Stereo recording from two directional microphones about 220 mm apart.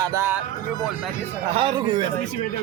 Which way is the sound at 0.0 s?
15° right (ahead or behind).